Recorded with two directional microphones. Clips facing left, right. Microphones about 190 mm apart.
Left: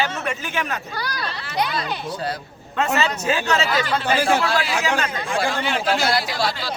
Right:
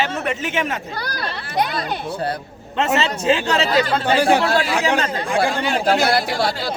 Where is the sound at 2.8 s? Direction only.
25° right (ahead or behind); by 5.9 s 40° right (ahead or behind).